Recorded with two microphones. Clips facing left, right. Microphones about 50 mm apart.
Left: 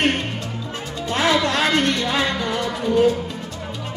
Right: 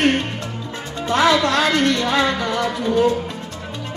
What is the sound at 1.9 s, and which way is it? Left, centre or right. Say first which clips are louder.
Speech: right 3 dB; right.